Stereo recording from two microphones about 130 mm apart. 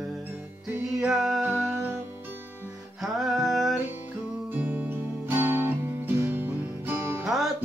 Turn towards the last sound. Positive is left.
turn(degrees=-15)  # may be behind; listen again after turning